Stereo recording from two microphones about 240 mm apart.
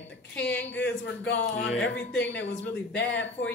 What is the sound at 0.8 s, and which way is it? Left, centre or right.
Speech, left.